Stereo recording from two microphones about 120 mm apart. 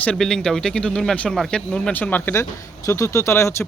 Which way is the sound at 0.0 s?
5° left (ahead or behind).